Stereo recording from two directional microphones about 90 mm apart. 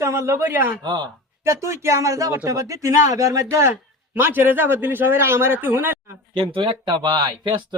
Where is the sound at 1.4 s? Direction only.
30° right (ahead or behind).